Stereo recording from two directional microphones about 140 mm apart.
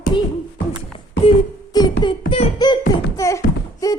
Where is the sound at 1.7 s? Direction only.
30° left (ahead or behind).